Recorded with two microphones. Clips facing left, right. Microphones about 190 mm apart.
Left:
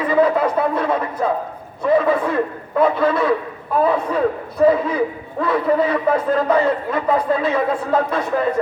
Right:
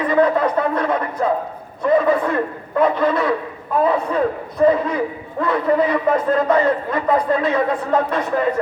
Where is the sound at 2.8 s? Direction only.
10° left (ahead or behind).